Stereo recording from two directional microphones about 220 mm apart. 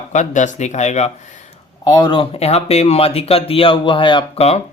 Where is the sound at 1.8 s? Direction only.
20° left (ahead or behind).